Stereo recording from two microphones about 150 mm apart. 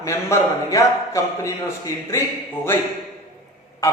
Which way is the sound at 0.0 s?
20° left (ahead or behind).